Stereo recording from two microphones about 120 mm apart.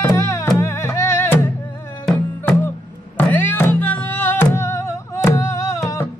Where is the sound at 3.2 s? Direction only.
15° left (ahead or behind).